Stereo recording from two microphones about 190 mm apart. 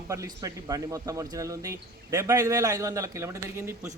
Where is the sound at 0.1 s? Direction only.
15° right (ahead or behind).